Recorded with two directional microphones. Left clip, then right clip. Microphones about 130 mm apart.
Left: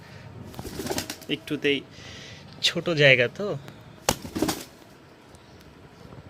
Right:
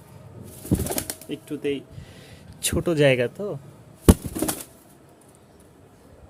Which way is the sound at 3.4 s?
30° right (ahead or behind).